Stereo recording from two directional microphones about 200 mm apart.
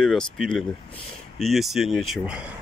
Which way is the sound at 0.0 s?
Centre (ahead or behind).